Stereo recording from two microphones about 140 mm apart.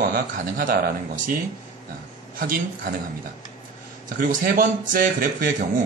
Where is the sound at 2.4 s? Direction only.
90° right.